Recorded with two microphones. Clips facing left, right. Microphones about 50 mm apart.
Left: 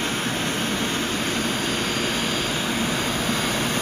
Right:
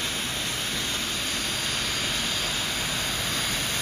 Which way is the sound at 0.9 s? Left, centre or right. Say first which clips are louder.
Left 6 dB; left.